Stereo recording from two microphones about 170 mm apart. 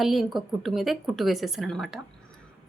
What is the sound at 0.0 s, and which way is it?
A woman's voice, centre (ahead or behind).